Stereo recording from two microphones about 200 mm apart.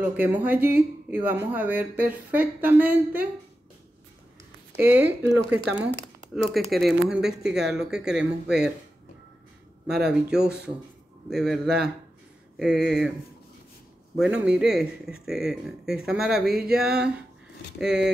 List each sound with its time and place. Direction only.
0.0 s speech: 10° right (ahead or behind)
4.7 s speech: 10° right (ahead or behind)
9.8 s speech: 5° right (ahead or behind)
14.1 s speech: 5° right (ahead or behind)